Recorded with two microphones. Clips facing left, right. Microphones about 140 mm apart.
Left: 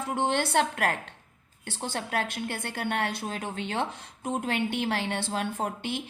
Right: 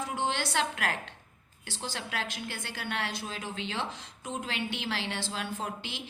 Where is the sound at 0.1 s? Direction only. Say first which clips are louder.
Left 8 dB; 55° left (ahead or behind).